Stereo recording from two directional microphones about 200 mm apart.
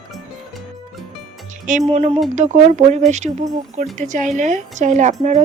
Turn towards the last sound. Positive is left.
turn(degrees=-35)  # may be behind; listen again after turning